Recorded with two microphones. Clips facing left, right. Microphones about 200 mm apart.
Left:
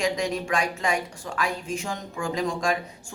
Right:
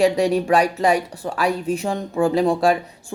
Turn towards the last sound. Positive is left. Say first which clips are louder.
# right 8 dB
turn(degrees=-35)  # may be behind; listen again after turning